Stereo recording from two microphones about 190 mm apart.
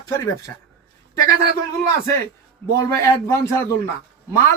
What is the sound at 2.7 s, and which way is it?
Speech, 15° left (ahead or behind).